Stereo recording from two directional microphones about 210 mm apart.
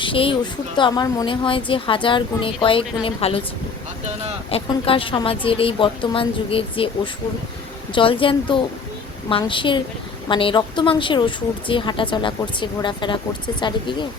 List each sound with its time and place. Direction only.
0.0 s a woman's voice: 25° left (ahead or behind)
4.5 s a woman's voice: 25° left (ahead or behind)